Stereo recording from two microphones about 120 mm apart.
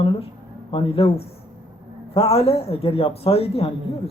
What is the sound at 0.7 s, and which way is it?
A man's voice, 50° left (ahead or behind).